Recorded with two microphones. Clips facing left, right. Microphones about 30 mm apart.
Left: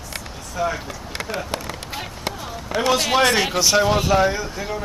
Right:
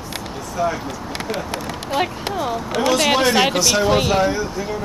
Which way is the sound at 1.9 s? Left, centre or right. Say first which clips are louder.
Right 11 dB; right.